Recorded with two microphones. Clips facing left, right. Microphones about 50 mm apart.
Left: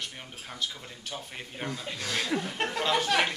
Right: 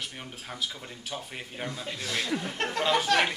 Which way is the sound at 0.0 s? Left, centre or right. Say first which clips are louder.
Right 1 dB; centre.